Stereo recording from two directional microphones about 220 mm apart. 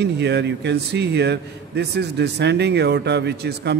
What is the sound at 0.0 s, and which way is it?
A man's voice, 50° right (ahead or behind).